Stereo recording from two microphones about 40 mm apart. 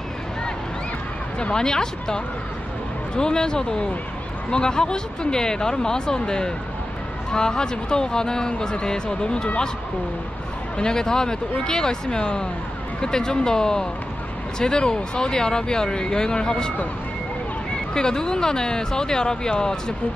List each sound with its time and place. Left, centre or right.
1.4 s speech: centre
10.8 s speech: centre
17.9 s speech: centre